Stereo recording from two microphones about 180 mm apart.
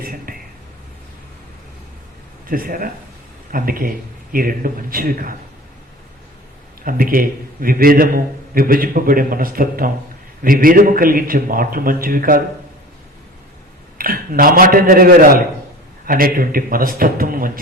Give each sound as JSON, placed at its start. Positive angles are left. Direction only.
{"t": 0.0, "sound": "a sound", "side_deg": -55}
{"t": 2.5, "sound": "a man's voice", "side_deg": -50}
{"t": 6.8, "sound": "a man's voice", "side_deg": -55}
{"t": 14.0, "sound": "a man's voice", "side_deg": -50}